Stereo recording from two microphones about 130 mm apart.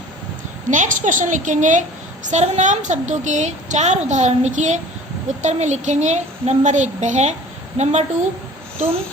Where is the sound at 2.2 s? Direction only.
65° right (ahead or behind).